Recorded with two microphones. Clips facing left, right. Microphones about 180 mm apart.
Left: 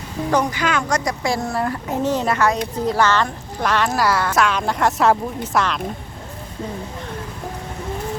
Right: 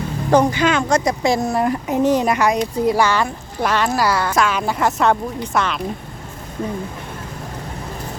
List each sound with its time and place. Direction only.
0.3 s a woman's voice: 30° right (ahead or behind); by 5.8 s centre (ahead or behind)